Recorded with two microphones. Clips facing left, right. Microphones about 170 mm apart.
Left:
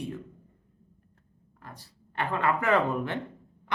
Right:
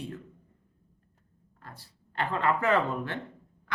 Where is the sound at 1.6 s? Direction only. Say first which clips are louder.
Left 2 dB; 15° left (ahead or behind).